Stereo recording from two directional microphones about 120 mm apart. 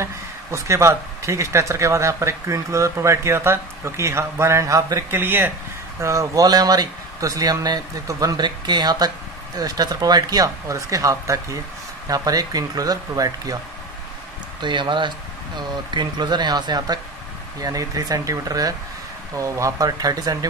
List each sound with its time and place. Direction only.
0.0 s speech: 25° right (ahead or behind)
5.1 s speech: 15° right (ahead or behind)
14.6 s speech: 40° right (ahead or behind)